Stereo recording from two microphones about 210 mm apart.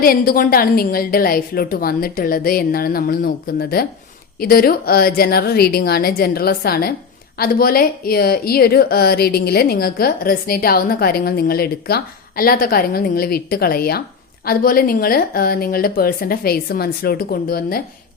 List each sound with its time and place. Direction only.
0.0 s a woman's voice: 45° left (ahead or behind)